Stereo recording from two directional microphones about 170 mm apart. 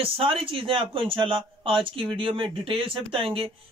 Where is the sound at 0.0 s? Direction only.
35° right (ahead or behind).